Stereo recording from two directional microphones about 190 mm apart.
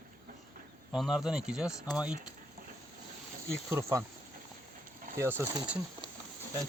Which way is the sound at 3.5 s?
15° right (ahead or behind).